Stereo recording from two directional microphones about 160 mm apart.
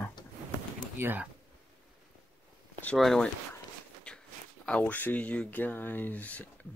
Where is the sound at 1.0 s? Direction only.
10° right (ahead or behind).